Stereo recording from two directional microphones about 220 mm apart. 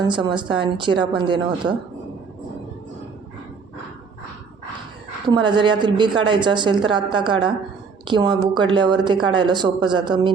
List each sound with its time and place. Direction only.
0.2 s a woman's voice: 20° right (ahead or behind)
5.3 s a woman's voice: 20° right (ahead or behind)